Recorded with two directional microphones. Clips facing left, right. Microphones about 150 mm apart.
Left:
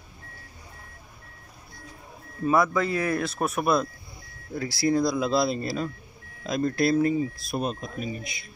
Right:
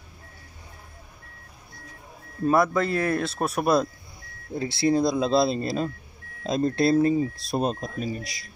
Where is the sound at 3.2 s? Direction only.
30° right (ahead or behind).